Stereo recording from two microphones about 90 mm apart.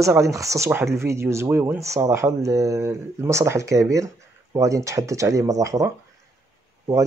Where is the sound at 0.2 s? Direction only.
35° right (ahead or behind).